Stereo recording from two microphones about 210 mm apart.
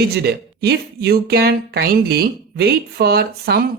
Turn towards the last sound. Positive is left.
turn(degrees=-50)  # may be behind; listen again after turning